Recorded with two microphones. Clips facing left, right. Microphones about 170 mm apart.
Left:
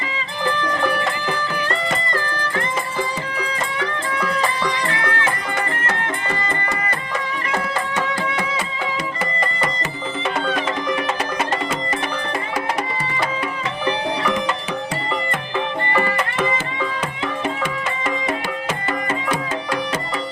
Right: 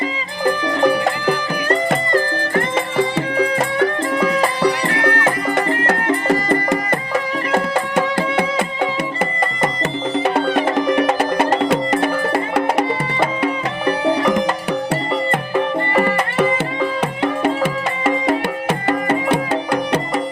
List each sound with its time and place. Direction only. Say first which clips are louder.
1.6 s music: right 6 dB; 45° right (ahead or behind)
7.5 s music: right 6 dB; 55° right (ahead or behind)
11.2 s music: right 7 dB; 65° right (ahead or behind)
15.5 s music: right 4 dB; 40° right (ahead or behind)
17.4 s music: right 6 dB; 70° right (ahead or behind)